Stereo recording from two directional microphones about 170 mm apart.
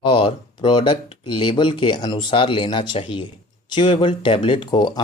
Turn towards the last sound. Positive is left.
turn(degrees=30)  # may be behind; listen again after turning